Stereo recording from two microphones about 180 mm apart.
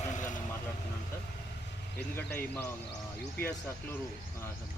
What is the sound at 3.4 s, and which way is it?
Speech, 60° left (ahead or behind).